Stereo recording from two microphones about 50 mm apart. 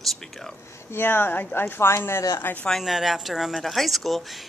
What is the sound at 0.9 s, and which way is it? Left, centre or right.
Speech, left.